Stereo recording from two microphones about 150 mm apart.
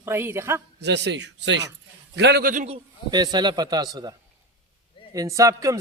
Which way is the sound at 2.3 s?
70° right (ahead or behind).